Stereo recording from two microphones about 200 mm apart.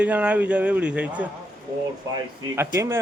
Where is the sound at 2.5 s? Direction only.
15° right (ahead or behind).